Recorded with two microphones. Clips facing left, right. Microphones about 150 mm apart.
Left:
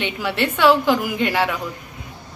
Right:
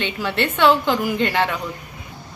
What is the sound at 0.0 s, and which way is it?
A woman's voice, 10° left (ahead or behind).